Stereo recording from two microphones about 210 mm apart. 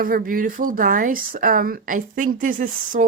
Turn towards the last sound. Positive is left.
turn(degrees=-40)  # may be behind; listen again after turning